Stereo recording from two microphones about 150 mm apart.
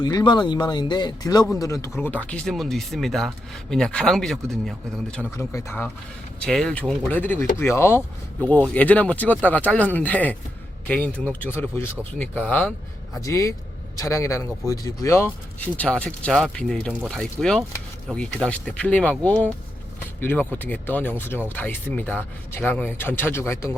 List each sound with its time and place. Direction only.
0.0 s speech: 30° left (ahead or behind)
2.0 s speech: 10° left (ahead or behind)
5.1 s speech: 15° left (ahead or behind)
6.4 s speech: 5° left (ahead or behind)
13.2 s speech: 20° left (ahead or behind)